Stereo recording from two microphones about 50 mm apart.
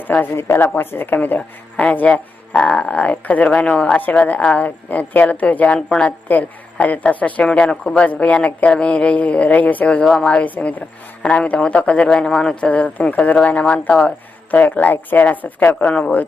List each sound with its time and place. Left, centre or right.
0.0 s speech: left
0.3 s speech: left
0.6 s speech: left
7.4 s speech: centre
12.0 s speech: centre
14.5 s speech: left